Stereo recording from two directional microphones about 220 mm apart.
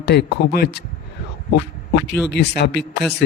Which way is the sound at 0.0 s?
50° left (ahead or behind).